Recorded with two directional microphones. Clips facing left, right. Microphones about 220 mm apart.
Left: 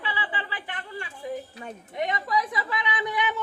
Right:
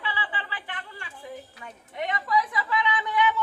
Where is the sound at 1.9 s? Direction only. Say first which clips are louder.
Even; 15° left (ahead or behind).